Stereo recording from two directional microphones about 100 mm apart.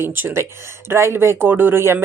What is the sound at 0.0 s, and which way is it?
Speech, 20° right (ahead or behind).